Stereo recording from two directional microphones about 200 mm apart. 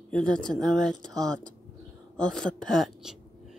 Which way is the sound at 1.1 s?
20° right (ahead or behind).